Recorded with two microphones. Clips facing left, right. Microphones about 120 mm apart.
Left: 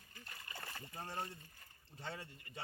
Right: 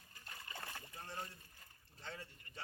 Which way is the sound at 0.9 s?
50° left (ahead or behind).